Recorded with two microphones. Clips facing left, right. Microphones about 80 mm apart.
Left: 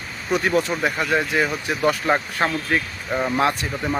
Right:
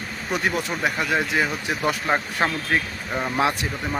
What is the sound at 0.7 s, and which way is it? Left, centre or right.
Speech, centre.